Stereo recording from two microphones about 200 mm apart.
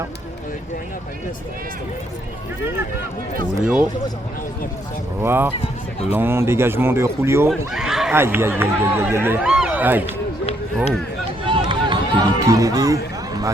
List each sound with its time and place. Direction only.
3.6 s speech: 5° right (ahead or behind)
5.2 s speech: 10° right (ahead or behind)
7.7 s speech: centre (ahead or behind)
11.4 s run: 25° right (ahead or behind)